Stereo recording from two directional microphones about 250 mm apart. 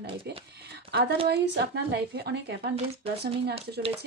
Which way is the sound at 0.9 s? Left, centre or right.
Right.